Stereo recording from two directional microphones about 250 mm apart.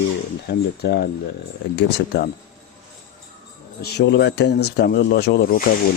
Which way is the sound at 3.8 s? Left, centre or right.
Left.